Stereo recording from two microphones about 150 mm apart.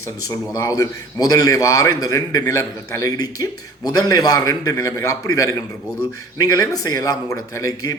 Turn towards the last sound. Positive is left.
turn(degrees=25)  # may be behind; listen again after turning